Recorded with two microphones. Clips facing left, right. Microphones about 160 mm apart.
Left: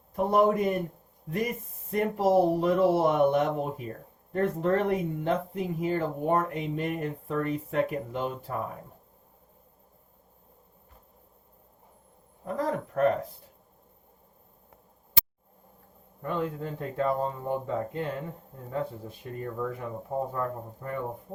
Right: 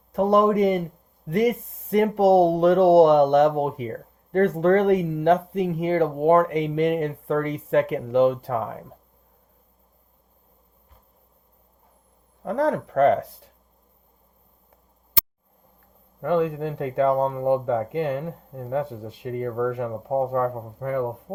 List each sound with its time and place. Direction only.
0.1 s speech: 80° right
12.5 s speech: 80° right
16.2 s speech: 90° right